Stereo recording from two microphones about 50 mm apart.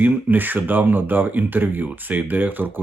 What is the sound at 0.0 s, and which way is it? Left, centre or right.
Speech, right.